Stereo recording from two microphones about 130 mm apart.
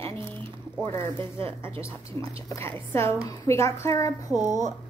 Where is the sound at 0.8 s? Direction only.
20° left (ahead or behind).